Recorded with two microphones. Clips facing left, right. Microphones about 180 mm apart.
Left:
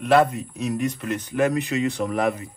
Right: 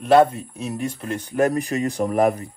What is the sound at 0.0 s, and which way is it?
Speech, 30° right (ahead or behind).